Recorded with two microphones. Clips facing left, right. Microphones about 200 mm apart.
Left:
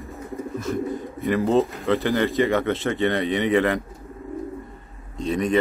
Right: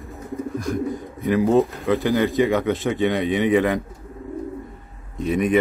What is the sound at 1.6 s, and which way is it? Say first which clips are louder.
A man's voice: right 2 dB; centre (ahead or behind).